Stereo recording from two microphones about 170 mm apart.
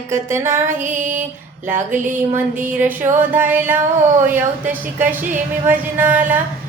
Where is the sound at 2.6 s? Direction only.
10° right (ahead or behind).